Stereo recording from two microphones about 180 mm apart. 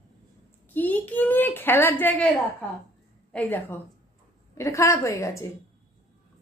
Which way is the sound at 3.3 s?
10° left (ahead or behind).